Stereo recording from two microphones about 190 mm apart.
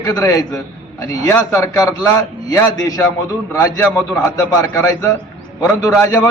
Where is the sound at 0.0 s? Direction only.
20° left (ahead or behind).